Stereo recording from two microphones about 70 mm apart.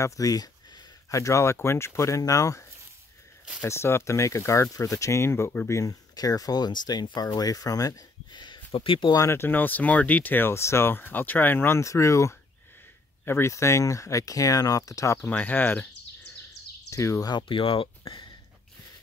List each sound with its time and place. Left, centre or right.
0.0 s a sound: left
1.2 s speech: left
3.6 s speech: left
6.1 s speech: left
7.2 s speech: left
9.3 s speech: left
11.8 s speech: left
15.2 s speech: left
16.9 s speech: left